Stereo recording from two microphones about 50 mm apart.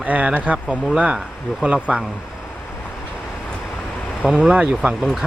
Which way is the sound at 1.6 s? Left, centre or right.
Right.